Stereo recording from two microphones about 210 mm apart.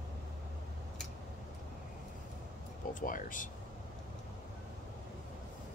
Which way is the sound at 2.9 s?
40° left (ahead or behind).